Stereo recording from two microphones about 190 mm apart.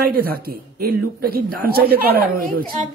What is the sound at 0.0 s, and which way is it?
Speech, 55° right (ahead or behind).